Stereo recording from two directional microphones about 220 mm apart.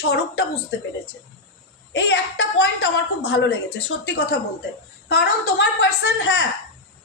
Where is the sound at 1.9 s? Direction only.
50° left (ahead or behind).